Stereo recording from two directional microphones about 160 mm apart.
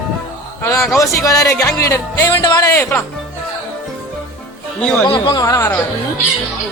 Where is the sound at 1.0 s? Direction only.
20° left (ahead or behind).